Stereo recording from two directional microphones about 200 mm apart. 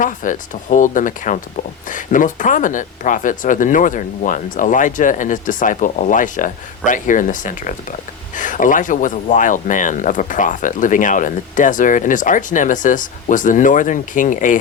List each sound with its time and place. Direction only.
0.0 s speech: 40° left (ahead or behind)